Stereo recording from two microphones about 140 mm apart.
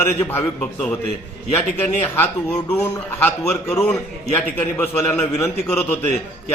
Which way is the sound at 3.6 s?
20° left (ahead or behind).